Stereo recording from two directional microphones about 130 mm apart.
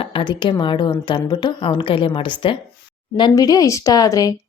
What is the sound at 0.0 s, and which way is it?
Speech, 40° left (ahead or behind).